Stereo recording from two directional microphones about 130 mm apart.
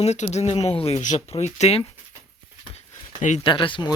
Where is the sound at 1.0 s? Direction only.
70° left (ahead or behind).